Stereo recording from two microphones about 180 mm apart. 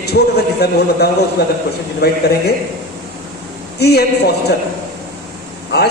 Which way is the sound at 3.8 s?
65° left (ahead or behind).